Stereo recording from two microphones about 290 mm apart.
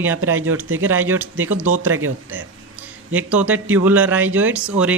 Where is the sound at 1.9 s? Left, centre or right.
Right.